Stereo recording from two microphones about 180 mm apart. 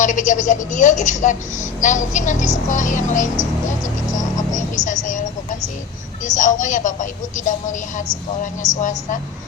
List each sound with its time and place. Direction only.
0.0 s speech: 45° left (ahead or behind)
5.0 s a sound: 45° left (ahead or behind)
6.2 s speech: 45° left (ahead or behind)